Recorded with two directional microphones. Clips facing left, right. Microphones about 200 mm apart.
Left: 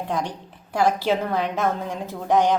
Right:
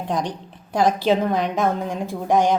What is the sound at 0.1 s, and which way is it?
A woman's voice, 15° right (ahead or behind).